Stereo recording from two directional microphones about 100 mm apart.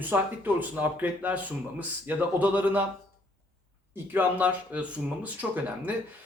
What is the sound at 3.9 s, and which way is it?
Speech, 20° right (ahead or behind).